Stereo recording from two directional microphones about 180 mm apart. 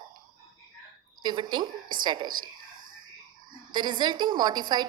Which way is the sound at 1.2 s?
25° right (ahead or behind).